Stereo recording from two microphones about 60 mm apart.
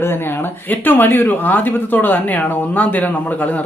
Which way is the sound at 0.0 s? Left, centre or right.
Left.